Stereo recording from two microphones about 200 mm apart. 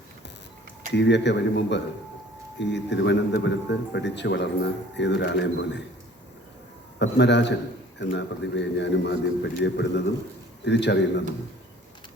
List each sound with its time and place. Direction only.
0.9 s a man's voice: 60° left (ahead or behind)
7.0 s a man's voice: 60° left (ahead or behind)